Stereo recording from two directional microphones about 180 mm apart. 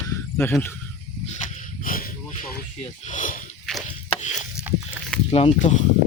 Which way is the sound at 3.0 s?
45° left (ahead or behind).